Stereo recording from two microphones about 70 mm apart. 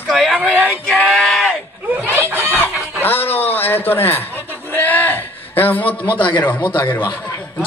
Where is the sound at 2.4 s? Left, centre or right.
Left.